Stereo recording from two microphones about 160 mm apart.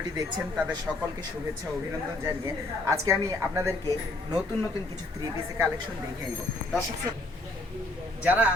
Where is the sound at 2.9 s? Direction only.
20° right (ahead or behind).